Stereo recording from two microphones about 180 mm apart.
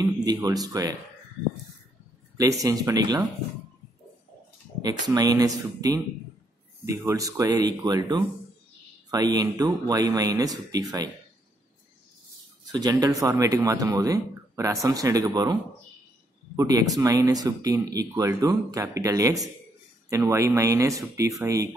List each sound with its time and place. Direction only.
0.0 s speech: 20° right (ahead or behind)
2.6 s speech: 20° right (ahead or behind)
4.8 s speech: 20° right (ahead or behind)
12.7 s speech: 20° right (ahead or behind)
16.5 s speech: 20° right (ahead or behind)